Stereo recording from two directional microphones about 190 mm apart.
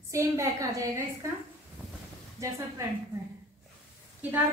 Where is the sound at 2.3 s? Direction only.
15° right (ahead or behind).